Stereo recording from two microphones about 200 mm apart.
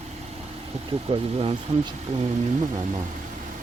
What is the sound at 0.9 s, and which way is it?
Speech, 30° right (ahead or behind).